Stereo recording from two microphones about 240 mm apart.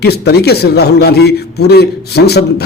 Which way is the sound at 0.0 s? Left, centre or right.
Left.